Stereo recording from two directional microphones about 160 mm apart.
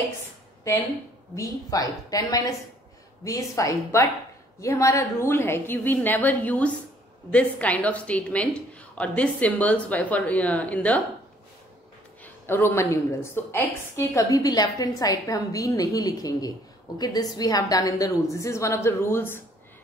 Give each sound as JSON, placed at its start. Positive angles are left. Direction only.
{"t": 0.7, "sound": "a woman's voice", "side_deg": 20}
{"t": 12.2, "sound": "a woman's voice", "side_deg": 15}